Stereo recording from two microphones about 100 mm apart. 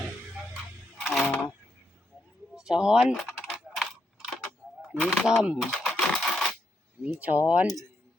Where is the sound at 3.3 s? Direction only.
Centre (ahead or behind).